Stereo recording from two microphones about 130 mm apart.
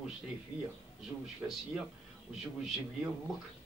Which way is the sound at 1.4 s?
10° right (ahead or behind).